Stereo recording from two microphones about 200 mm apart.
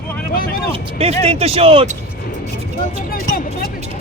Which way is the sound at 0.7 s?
30° right (ahead or behind).